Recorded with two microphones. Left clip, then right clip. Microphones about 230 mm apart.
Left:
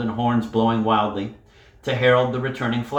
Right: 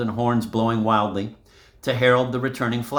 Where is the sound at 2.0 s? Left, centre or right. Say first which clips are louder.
Left 1 dB; right.